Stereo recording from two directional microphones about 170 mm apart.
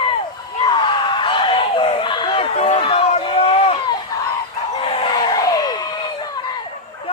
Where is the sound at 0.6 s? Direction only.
30° left (ahead or behind).